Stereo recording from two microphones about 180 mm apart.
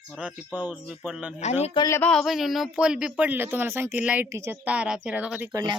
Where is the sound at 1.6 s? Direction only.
25° left (ahead or behind).